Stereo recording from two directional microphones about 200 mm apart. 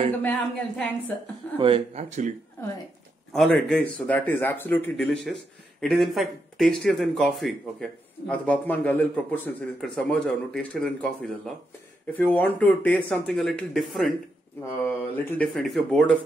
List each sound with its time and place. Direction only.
0.2 s a woman's voice: 5° left (ahead or behind)
1.6 s speech: 25° right (ahead or behind)
2.0 s speech: 35° right (ahead or behind)
3.3 s speech: 5° left (ahead or behind)
15.2 s speech: 5° left (ahead or behind)